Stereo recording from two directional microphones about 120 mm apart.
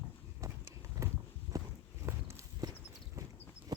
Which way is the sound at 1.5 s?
30° right (ahead or behind).